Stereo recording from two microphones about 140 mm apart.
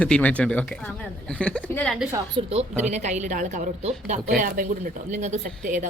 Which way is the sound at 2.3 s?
50° right (ahead or behind).